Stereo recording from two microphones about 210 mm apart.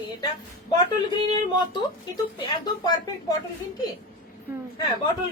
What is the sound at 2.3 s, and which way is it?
Speech, 20° left (ahead or behind).